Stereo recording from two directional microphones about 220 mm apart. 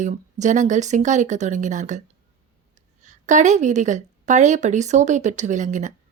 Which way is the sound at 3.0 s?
35° right (ahead or behind).